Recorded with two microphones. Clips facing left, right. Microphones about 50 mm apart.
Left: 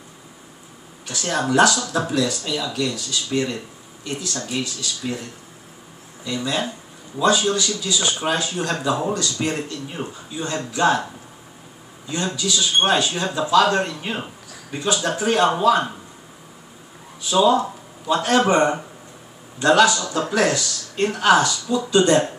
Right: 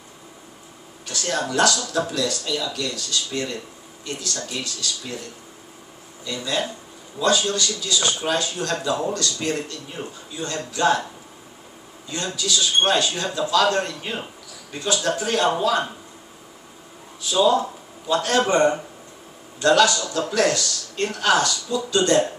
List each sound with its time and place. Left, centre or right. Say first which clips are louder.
1.0 s speech: left 2 dB; centre
6.2 s speech: left 2 dB; centre
12.1 s speech: left 2 dB; centre
17.2 s speech: left 2 dB; centre